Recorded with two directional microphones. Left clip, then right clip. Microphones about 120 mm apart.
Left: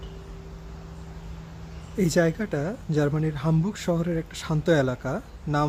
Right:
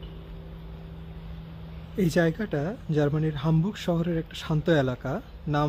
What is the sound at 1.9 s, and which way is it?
Speech, 5° right (ahead or behind).